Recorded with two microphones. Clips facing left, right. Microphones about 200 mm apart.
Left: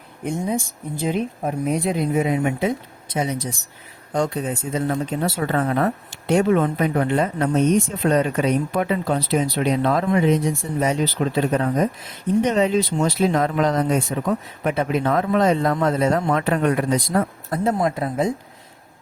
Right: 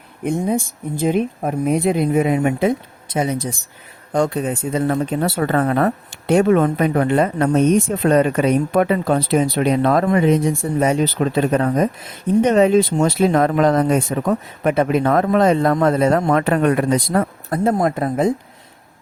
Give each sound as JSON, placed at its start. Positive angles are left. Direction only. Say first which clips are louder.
{"t": 0.3, "sound": "speech", "louder": "right 4 dB", "side_deg": -55}